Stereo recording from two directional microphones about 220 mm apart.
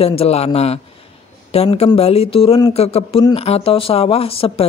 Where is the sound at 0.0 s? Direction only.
25° left (ahead or behind).